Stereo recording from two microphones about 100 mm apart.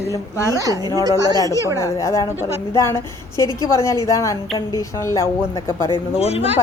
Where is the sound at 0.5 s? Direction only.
35° right (ahead or behind).